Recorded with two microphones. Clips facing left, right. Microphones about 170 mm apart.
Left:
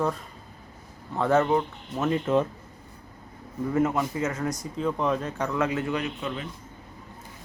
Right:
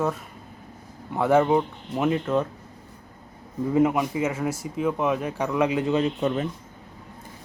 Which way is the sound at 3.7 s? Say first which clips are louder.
Right 4 dB; 15° right (ahead or behind).